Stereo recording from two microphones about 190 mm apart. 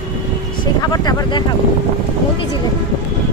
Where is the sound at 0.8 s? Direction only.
20° left (ahead or behind).